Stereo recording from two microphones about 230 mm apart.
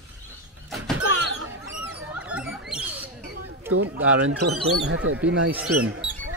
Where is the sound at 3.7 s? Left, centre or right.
Centre.